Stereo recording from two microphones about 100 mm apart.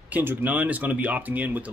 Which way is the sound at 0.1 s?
20° right (ahead or behind).